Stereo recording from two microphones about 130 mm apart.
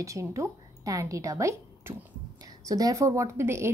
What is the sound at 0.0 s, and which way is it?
A woman's voice, 25° right (ahead or behind).